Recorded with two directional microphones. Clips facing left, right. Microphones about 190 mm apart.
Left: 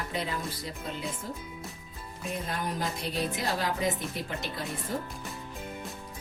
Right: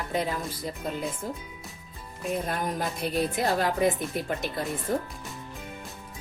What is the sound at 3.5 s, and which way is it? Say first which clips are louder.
Speech: right 5 dB; 50° right (ahead or behind).